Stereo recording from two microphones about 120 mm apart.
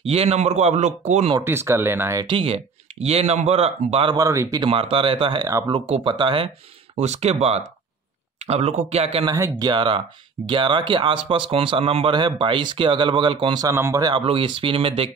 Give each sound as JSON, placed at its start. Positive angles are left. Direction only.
{"t": 0.0, "sound": "speech", "side_deg": -60}
{"t": 1.4, "sound": "speech", "side_deg": -20}
{"t": 2.2, "sound": "speech", "side_deg": -50}
{"t": 4.1, "sound": "speech", "side_deg": -25}
{"t": 4.6, "sound": "speech", "side_deg": -50}
{"t": 5.4, "sound": "speech", "side_deg": -25}
{"t": 5.7, "sound": "speech", "side_deg": -50}
{"t": 7.0, "sound": "speech", "side_deg": -65}
{"t": 9.3, "sound": "speech", "side_deg": -30}
{"t": 9.7, "sound": "speech", "side_deg": -40}
{"t": 13.7, "sound": "speech", "side_deg": -25}
{"t": 14.0, "sound": "speech", "side_deg": -45}